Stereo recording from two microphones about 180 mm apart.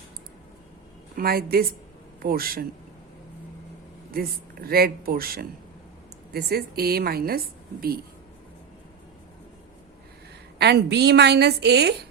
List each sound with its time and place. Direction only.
1.1 s a woman's voice: 55° right (ahead or behind)
4.1 s a woman's voice: 55° right (ahead or behind)
10.6 s a woman's voice: 70° right (ahead or behind)